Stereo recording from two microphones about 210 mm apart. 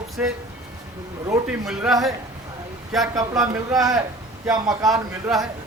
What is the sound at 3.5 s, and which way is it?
A man's voice, 15° right (ahead or behind).